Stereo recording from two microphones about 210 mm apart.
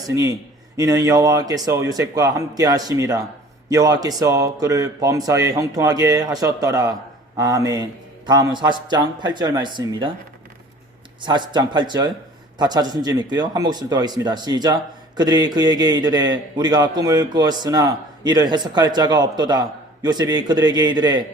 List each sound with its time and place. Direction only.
0.1 s speech: 15° right (ahead or behind)
11.2 s speech: 20° right (ahead or behind)